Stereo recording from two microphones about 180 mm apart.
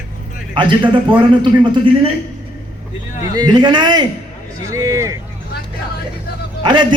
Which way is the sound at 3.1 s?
45° left (ahead or behind).